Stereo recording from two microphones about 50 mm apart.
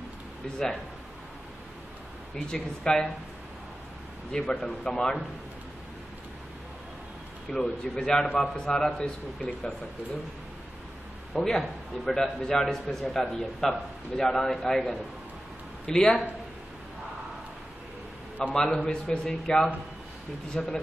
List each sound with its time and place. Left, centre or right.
2.5 s a man's voice: centre
4.3 s a man's voice: centre
7.5 s a man's voice: centre
11.3 s a man's voice: centre
18.5 s a man's voice: centre